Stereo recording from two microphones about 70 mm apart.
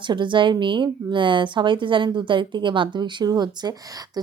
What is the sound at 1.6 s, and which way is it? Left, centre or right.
Speech, right.